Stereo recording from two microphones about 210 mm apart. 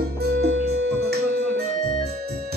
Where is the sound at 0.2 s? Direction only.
50° right (ahead or behind).